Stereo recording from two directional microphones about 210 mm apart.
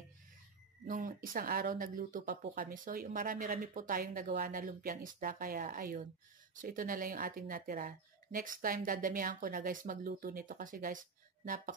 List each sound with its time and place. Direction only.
0.8 s speech: 40° right (ahead or behind)